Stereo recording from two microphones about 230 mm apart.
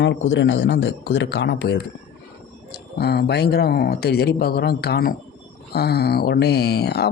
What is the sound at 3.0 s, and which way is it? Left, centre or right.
Speech, left.